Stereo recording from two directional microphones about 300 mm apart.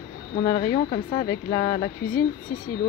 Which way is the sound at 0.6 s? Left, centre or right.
Left.